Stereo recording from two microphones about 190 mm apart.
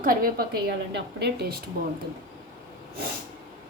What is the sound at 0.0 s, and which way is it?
A woman's voice, 45° right (ahead or behind).